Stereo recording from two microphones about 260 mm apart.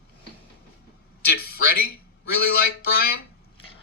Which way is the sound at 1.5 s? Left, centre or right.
Left.